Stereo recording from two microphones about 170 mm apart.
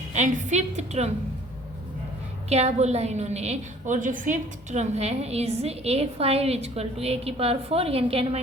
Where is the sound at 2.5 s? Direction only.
40° right (ahead or behind).